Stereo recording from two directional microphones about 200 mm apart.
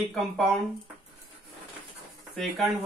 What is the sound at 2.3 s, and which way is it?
Speech, centre (ahead or behind).